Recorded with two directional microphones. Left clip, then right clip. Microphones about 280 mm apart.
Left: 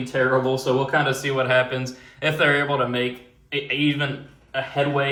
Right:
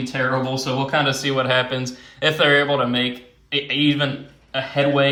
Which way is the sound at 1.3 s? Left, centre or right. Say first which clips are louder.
Left 1 dB; centre.